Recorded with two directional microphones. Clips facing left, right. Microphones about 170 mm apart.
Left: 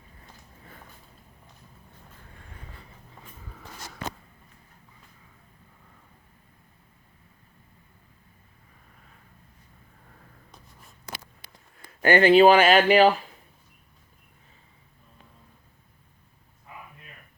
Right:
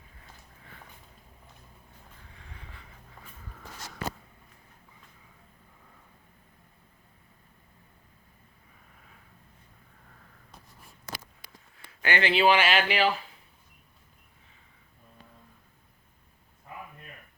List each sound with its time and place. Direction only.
0.6 s walk: 40° left (ahead or behind)
2.3 s vehicle: 45° left (ahead or behind)
11.9 s speech: 45° left (ahead or behind)